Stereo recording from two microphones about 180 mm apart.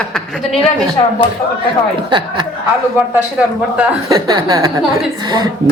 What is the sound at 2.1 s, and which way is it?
Speech, 25° right (ahead or behind).